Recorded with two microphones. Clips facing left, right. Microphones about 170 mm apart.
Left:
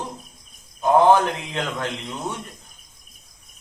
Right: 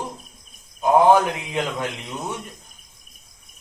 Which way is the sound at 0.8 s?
10° right (ahead or behind).